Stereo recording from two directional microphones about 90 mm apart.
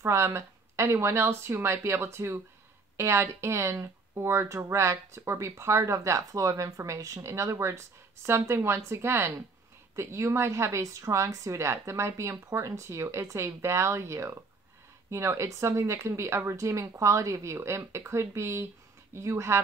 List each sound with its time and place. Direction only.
0.0 s speech: 30° right (ahead or behind)